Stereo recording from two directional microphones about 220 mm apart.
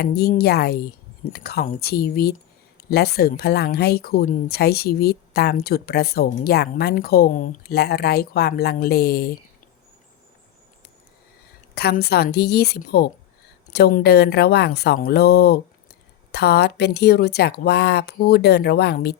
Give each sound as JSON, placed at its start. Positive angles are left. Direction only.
{"t": 0.0, "sound": "a woman's voice", "side_deg": 45}
{"t": 11.7, "sound": "a woman's voice", "side_deg": 45}